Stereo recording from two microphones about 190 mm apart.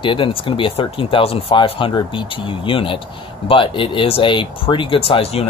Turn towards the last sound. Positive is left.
turn(degrees=30)  # may be behind; listen again after turning